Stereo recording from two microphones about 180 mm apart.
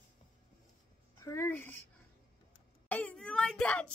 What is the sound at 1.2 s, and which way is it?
Speech, 15° left (ahead or behind).